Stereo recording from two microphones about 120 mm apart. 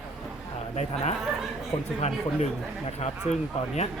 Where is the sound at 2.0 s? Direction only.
60° left (ahead or behind).